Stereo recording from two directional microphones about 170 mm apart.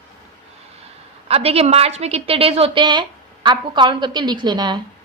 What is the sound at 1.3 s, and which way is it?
A woman's voice, 35° right (ahead or behind).